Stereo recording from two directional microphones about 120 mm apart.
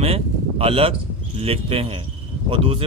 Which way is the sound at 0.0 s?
50° right (ahead or behind).